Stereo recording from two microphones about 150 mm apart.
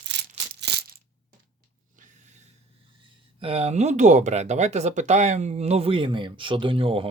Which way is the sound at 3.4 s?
45° right (ahead or behind).